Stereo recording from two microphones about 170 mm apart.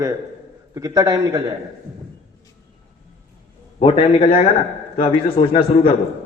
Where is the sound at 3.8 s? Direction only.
35° left (ahead or behind).